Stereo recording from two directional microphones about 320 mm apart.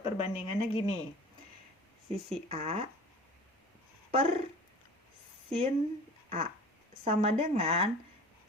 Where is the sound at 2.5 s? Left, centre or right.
Centre.